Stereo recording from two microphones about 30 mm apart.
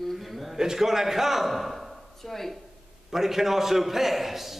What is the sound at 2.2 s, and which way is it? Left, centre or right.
Speech, centre.